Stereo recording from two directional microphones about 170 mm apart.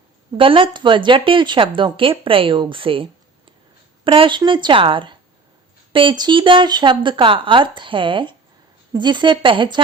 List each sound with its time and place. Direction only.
0.3 s a woman's voice: 30° right (ahead or behind)